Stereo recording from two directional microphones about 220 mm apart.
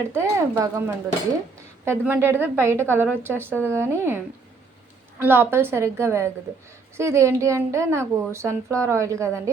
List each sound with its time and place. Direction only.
0.1 s a woman's voice: 10° right (ahead or behind)
5.2 s a woman's voice: 10° right (ahead or behind)